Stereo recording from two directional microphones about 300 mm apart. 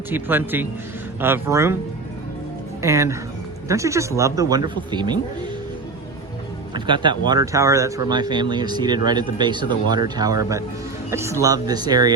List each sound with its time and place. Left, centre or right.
0.1 s speech: centre
2.8 s speech: centre
6.7 s speech: centre